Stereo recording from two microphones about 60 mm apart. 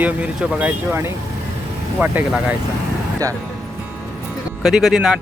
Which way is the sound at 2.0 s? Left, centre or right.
Right.